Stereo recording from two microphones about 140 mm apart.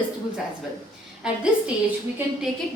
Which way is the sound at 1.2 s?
5° right (ahead or behind).